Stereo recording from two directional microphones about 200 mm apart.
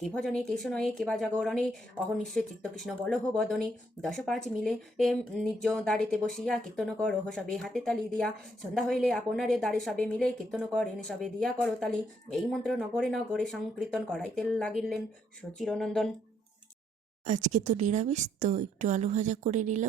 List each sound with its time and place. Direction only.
0.0 s a woman's voice: centre (ahead or behind)
17.2 s a woman's voice: 35° right (ahead or behind)